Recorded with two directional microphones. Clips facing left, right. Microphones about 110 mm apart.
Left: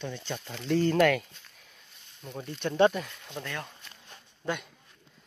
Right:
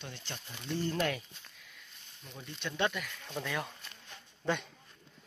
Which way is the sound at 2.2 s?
45° left (ahead or behind).